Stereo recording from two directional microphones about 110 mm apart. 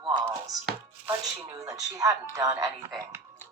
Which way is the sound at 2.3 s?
30° right (ahead or behind).